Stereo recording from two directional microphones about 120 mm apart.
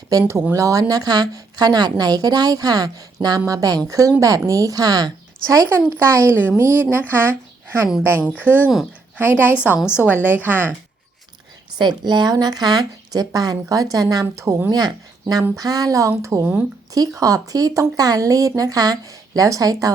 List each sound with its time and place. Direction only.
0.1 s a woman's voice: 25° right (ahead or behind)
11.8 s speech: 40° right (ahead or behind); by 16.6 s 15° right (ahead or behind)
16.9 s speech: 30° right (ahead or behind)